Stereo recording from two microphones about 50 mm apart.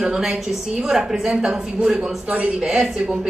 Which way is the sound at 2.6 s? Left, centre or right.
Centre.